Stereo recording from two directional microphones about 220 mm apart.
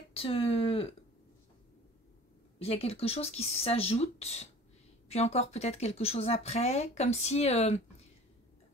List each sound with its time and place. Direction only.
0.1 s speech: 25° left (ahead or behind)
2.6 s speech: 25° left (ahead or behind)